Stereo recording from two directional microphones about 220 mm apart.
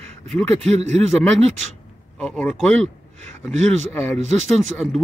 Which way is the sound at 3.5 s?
30° right (ahead or behind).